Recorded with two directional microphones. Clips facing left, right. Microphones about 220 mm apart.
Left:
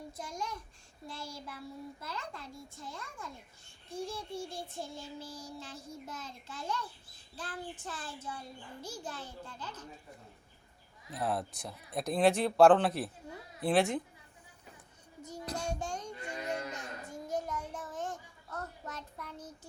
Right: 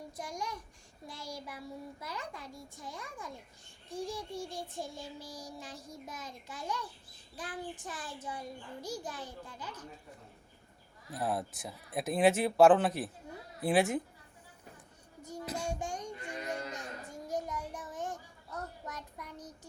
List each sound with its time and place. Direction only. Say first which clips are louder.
0.2 s child singing: right 1 dB; 15° right (ahead or behind)
11.1 s speech: even; 5° right (ahead or behind)
15.2 s child singing: right 1 dB; 15° right (ahead or behind)
15.8 s a sound: even; 15° right (ahead or behind)